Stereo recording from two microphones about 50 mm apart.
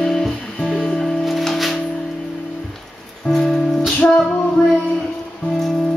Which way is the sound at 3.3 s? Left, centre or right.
Centre.